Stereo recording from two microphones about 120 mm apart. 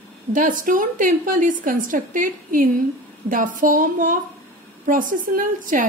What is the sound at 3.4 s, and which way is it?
Speech, 90° right.